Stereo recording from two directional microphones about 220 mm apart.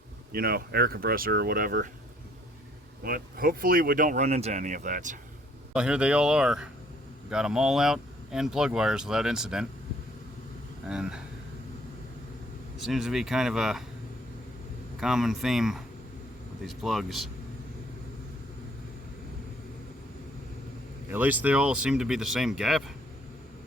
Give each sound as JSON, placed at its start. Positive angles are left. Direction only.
{"t": 0.3, "sound": "speech", "side_deg": -45}
{"t": 3.0, "sound": "speech", "side_deg": -40}
{"t": 5.7, "sound": "speech", "side_deg": -5}
{"t": 10.8, "sound": "speech", "side_deg": -5}
{"t": 12.8, "sound": "speech", "side_deg": 0}
{"t": 15.0, "sound": "speech", "side_deg": 0}
{"t": 21.1, "sound": "speech", "side_deg": -10}